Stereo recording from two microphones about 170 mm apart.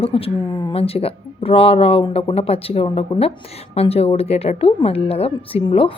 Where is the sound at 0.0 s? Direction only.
35° left (ahead or behind).